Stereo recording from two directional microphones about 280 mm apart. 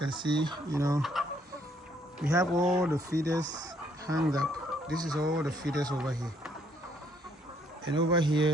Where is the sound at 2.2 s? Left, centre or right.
Centre.